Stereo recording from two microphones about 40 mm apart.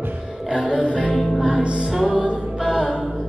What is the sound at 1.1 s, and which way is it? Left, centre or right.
Music, centre.